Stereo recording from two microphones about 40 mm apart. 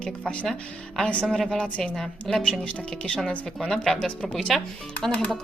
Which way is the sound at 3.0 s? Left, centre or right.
Centre.